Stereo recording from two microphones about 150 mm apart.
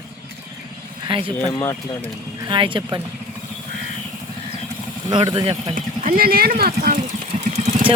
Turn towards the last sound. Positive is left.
turn(degrees=-40)  # may be behind; listen again after turning